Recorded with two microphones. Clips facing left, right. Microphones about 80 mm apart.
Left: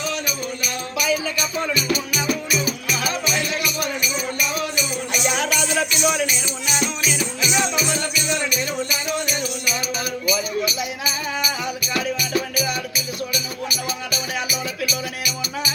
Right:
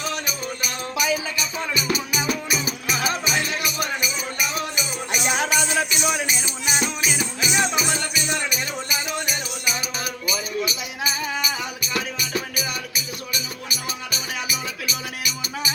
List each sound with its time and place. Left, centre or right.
0.3 s music: right
4.8 s music: right
11.9 s music: right
14.1 s music: right